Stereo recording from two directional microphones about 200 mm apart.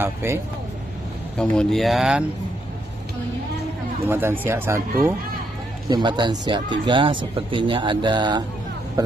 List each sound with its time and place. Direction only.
0.0 s speech: 10° right (ahead or behind)
1.4 s speech: 5° left (ahead or behind)
4.1 s speech: 10° right (ahead or behind)
5.9 s speech: 20° right (ahead or behind)